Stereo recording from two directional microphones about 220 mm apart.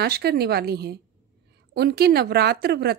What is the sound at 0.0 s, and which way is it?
A woman's voice, 45° right (ahead or behind).